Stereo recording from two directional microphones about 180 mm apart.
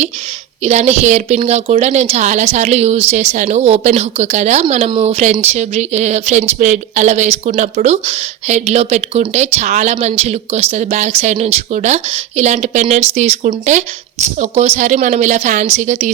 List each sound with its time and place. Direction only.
0.6 s speech: 40° right (ahead or behind)